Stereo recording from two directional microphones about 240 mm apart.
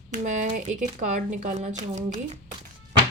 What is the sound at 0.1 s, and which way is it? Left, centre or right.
Speech, right.